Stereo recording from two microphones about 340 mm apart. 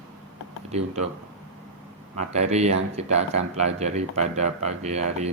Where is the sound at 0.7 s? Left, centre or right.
Centre.